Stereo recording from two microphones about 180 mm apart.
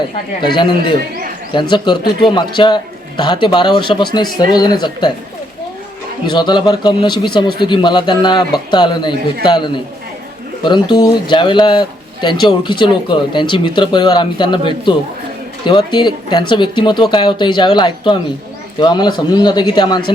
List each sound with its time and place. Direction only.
0.4 s speech: 25° left (ahead or behind)
6.2 s speech: 25° left (ahead or behind)